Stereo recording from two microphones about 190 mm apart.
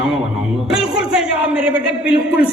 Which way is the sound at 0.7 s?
5° right (ahead or behind).